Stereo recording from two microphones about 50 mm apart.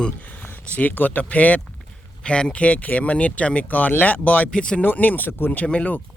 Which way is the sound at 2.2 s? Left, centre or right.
Centre.